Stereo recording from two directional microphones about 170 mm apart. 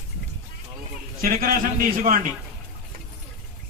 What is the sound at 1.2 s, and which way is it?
Speech, 60° right (ahead or behind).